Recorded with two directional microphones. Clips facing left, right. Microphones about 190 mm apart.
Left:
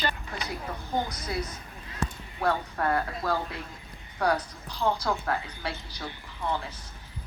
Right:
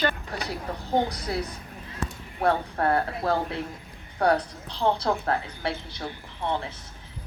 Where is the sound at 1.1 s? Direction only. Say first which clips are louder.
Right 4 dB; 65° right (ahead or behind).